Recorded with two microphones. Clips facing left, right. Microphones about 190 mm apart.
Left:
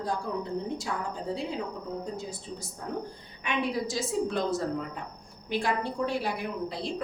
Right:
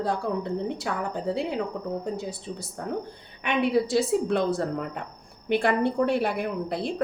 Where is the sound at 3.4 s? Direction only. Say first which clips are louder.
Right 6 dB; 65° right (ahead or behind).